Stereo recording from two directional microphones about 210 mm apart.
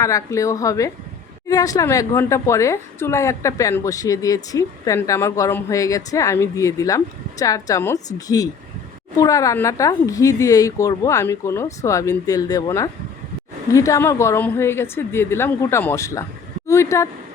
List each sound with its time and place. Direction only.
0.0 s speech: 15° left (ahead or behind)
9.1 s speech: 15° left (ahead or behind)